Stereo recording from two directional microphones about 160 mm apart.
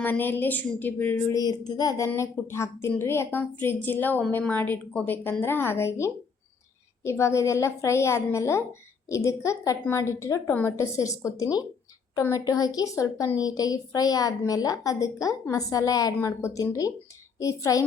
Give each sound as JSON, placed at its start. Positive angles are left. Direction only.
{"t": 0.0, "sound": "a woman's voice", "side_deg": 10}
{"t": 1.4, "sound": "a woman's voice", "side_deg": 25}